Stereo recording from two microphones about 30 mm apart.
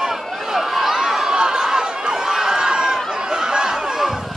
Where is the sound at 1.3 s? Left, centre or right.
Right.